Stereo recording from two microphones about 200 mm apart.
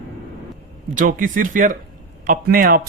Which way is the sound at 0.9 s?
40° right (ahead or behind).